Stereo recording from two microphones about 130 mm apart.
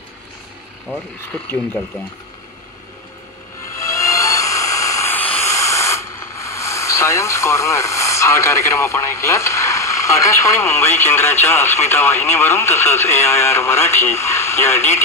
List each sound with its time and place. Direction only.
1.3 s speech: 5° left (ahead or behind)
3.7 s music: 25° left (ahead or behind)
5.1 s white noise: 15° left (ahead or behind)
5.5 s speech: 25° left (ahead or behind)